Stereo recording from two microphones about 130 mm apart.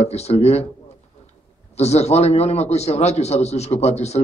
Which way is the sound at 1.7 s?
55° left (ahead or behind).